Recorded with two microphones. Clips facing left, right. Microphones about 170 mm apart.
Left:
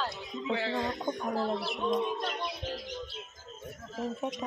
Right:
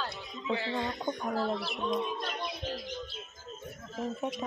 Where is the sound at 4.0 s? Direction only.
Centre (ahead or behind).